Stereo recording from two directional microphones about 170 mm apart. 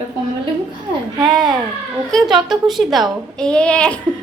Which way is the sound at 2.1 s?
5° left (ahead or behind).